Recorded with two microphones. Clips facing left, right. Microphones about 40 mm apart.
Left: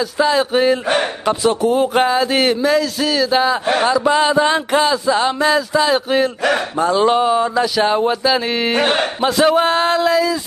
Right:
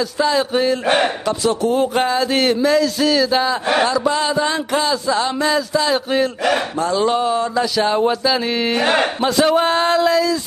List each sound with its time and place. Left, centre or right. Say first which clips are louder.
0.2 s music: left 2 dB; centre
1.7 s music: left 2 dB; centre
3.8 s speech: left 3 dB; centre
5.9 s speech: left 2 dB; centre
6.8 s music: left 5 dB; centre
9.2 s speech: left 4 dB; centre